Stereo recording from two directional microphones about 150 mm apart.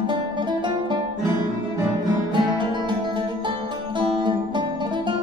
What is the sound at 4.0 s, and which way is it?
Music, 30° right (ahead or behind).